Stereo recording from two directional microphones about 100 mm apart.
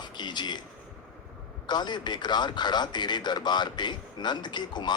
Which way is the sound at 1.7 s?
45° left (ahead or behind).